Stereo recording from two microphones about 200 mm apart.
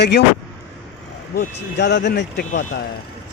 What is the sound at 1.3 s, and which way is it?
Speech, 50° left (ahead or behind).